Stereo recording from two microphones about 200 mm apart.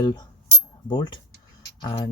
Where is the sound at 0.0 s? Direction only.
20° left (ahead or behind).